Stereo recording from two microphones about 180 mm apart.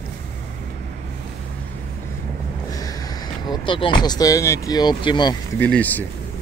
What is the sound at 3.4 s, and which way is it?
Speech, 30° left (ahead or behind).